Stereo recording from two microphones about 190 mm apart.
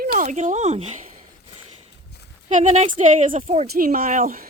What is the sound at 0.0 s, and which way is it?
Speech, 40° right (ahead or behind).